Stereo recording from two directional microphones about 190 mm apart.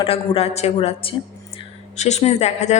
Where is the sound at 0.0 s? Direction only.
30° left (ahead or behind).